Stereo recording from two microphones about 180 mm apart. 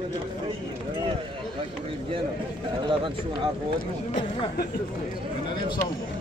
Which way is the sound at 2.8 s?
25° right (ahead or behind).